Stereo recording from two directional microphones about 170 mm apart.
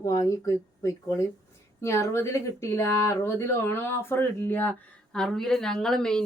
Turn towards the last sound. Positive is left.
turn(degrees=5)  # may be behind; listen again after turning